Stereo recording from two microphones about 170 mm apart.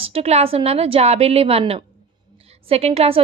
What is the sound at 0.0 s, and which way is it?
A woman's voice, 35° right (ahead or behind).